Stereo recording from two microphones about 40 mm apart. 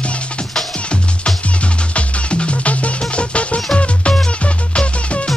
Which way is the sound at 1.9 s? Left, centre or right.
Left.